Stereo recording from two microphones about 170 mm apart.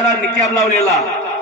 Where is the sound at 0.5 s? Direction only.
45° left (ahead or behind).